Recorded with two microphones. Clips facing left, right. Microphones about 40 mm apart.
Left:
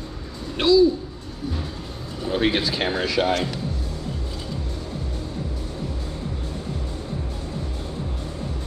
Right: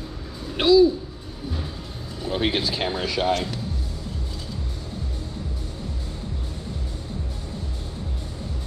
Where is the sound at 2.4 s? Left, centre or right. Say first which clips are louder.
Left 2 dB; left.